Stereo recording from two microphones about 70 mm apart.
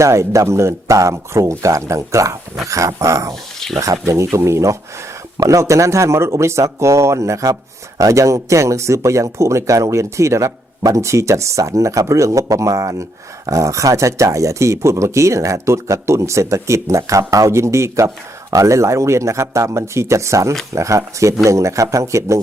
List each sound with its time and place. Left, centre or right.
0.0 s speech: right